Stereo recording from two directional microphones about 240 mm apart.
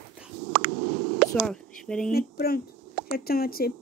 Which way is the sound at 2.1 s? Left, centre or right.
Left.